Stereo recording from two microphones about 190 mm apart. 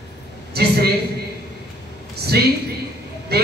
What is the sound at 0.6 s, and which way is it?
Speech, 55° right (ahead or behind).